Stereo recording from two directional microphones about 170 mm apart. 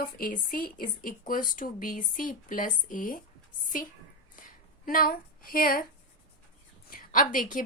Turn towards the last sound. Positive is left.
turn(degrees=50)  # may be behind; listen again after turning